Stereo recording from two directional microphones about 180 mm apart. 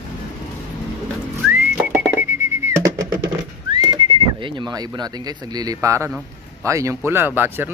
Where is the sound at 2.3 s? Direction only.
15° right (ahead or behind).